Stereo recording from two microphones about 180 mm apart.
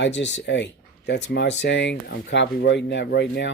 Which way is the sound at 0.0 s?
80° left.